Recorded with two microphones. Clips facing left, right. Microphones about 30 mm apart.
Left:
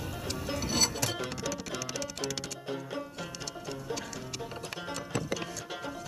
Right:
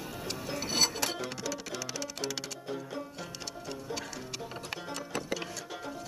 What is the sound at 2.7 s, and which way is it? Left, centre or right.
Music, left.